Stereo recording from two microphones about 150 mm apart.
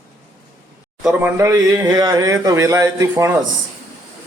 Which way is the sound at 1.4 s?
20° right (ahead or behind).